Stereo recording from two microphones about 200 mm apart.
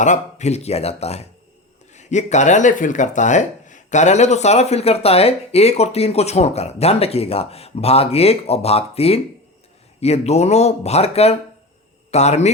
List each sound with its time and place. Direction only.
0.0 s speech: 35° left (ahead or behind)